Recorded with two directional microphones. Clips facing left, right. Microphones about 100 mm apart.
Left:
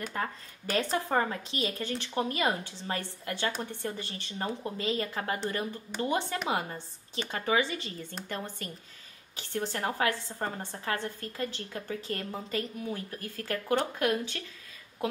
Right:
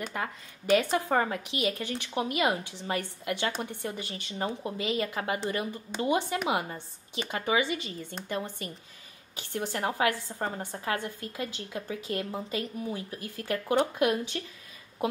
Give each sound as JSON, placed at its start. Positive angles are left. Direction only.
{"t": 0.7, "sound": "a woman's voice", "side_deg": -15}